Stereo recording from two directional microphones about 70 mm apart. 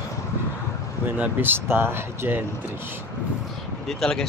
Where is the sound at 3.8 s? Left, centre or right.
Centre.